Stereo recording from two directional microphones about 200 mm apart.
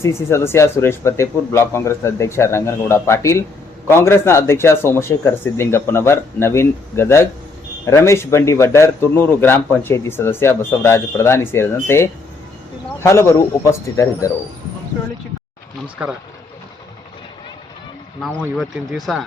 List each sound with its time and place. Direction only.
0.0 s a man's voice: 15° left (ahead or behind)
18.2 s speech: centre (ahead or behind)